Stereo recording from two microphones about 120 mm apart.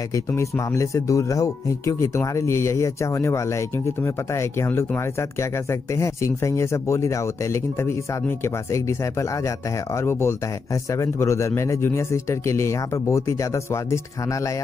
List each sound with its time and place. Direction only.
0.1 s speech: 25° left (ahead or behind)